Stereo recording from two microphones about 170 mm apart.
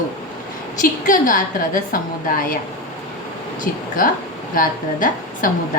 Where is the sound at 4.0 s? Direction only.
55° left (ahead or behind).